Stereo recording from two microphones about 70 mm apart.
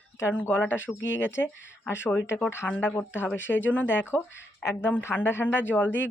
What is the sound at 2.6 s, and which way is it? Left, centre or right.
Speech, centre.